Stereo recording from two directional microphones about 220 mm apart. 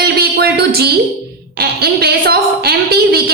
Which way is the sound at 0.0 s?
45° right (ahead or behind).